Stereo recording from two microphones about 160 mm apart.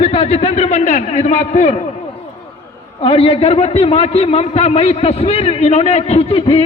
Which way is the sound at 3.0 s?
35° left (ahead or behind).